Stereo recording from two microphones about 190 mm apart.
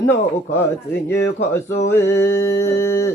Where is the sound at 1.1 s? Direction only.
15° left (ahead or behind).